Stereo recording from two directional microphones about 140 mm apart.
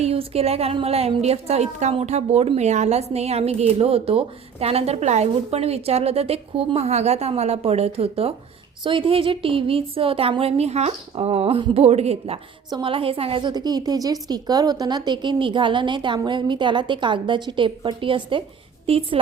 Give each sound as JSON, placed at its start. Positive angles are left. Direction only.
{"t": 0.0, "sound": "a woman's voice", "side_deg": -45}